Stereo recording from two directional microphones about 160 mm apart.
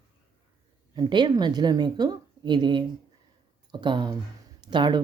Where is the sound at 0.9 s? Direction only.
25° right (ahead or behind).